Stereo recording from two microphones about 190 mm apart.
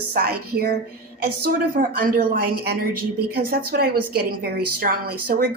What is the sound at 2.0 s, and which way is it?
A woman's voice, 50° right (ahead or behind).